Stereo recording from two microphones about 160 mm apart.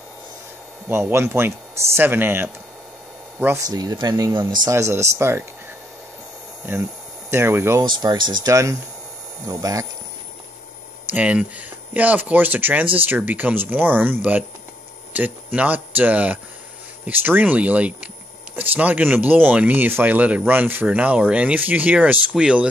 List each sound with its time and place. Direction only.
0.8 s speech: 15° right (ahead or behind)
3.7 s speech: 25° right (ahead or behind)
6.6 s speech: 15° right (ahead or behind)
7.8 s speech: 25° right (ahead or behind)
11.1 s speech: 10° right (ahead or behind)